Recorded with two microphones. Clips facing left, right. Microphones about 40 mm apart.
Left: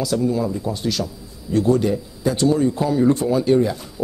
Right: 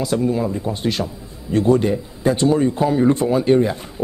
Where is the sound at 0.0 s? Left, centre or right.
Right.